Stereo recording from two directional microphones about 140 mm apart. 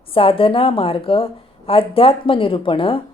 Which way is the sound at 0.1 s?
40° left (ahead or behind).